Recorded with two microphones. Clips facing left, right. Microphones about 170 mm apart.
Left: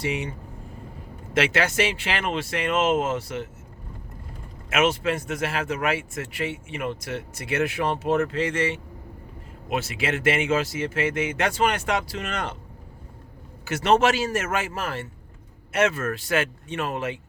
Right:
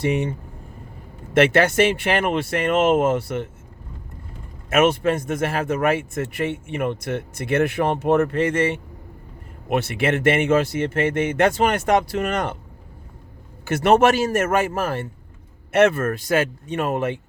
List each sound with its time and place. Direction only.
0.0 s speech: 50° right (ahead or behind)
1.3 s speech: 55° right (ahead or behind)
4.7 s speech: 50° right (ahead or behind)
13.7 s speech: 55° right (ahead or behind)